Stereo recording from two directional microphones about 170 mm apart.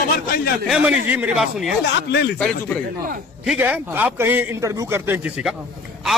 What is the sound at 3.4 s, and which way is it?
A man's voice, 5° right (ahead or behind).